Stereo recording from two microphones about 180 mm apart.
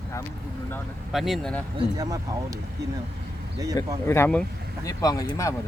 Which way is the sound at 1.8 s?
20° right (ahead or behind).